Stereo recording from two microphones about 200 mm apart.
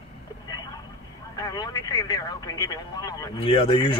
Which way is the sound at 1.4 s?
20° left (ahead or behind).